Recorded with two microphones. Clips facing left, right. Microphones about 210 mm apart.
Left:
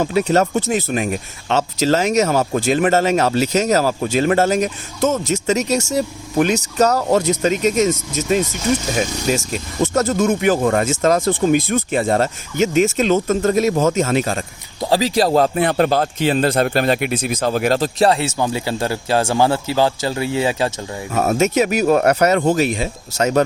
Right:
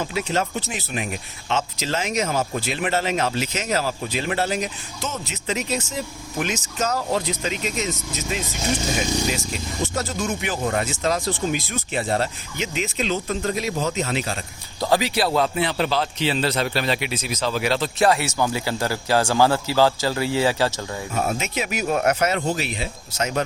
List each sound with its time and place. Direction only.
0.0 s speech: 40° left (ahead or behind)
2.3 s speech: 60° left (ahead or behind)
10.0 s speech: 50° left (ahead or behind)
14.8 s speech: 25° left (ahead or behind)
15.1 s a man's voice: 40° left (ahead or behind); by 20.7 s 20° left (ahead or behind)
21.1 s speech: 70° left (ahead or behind)
21.3 s a man's voice: 45° left (ahead or behind)
22.4 s speech: 50° left (ahead or behind)